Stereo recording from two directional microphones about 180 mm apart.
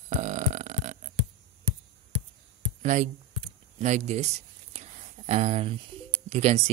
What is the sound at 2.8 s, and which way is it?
Speech, 40° right (ahead or behind).